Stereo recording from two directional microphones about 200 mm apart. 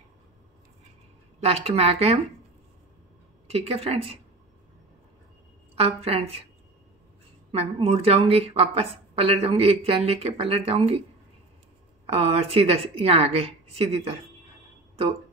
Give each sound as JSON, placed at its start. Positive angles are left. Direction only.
{"t": 1.4, "sound": "a woman's voice", "side_deg": -30}
{"t": 3.5, "sound": "a woman's voice", "side_deg": -30}
{"t": 5.8, "sound": "a woman's voice", "side_deg": -30}
{"t": 7.5, "sound": "a woman's voice", "side_deg": -30}
{"t": 12.1, "sound": "a woman's voice", "side_deg": -30}